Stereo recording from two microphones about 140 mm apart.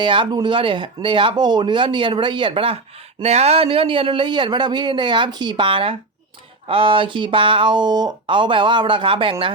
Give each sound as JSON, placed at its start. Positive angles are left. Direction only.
{"t": 0.0, "sound": "speech", "side_deg": -35}